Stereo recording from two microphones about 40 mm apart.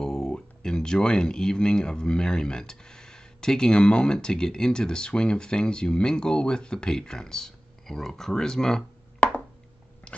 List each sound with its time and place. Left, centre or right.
0.0 s speech: centre